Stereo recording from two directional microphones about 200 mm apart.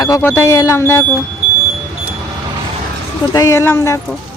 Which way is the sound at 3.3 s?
15° left (ahead or behind).